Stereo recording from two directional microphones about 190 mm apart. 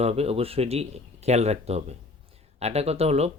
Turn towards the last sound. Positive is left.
turn(degrees=-35)  # may be behind; listen again after turning